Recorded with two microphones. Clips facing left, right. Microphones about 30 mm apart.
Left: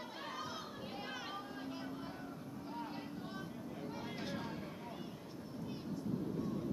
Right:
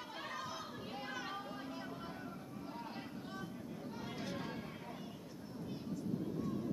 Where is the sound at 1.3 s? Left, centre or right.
Centre.